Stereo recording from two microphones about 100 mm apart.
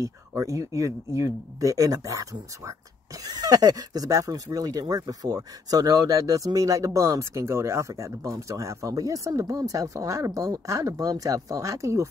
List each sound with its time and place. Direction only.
0.0 s speech: 30° right (ahead or behind)